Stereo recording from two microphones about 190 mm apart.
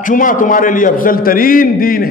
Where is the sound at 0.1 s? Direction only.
45° left (ahead or behind).